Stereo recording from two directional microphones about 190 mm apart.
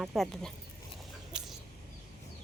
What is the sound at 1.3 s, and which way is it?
Chicken, 5° right (ahead or behind).